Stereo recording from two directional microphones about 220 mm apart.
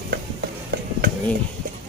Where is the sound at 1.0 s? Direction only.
50° right (ahead or behind).